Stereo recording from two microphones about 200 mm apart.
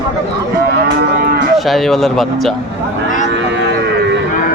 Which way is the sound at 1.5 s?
Centre (ahead or behind).